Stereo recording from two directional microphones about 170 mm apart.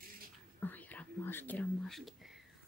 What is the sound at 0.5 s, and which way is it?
Whispering, 10° left (ahead or behind).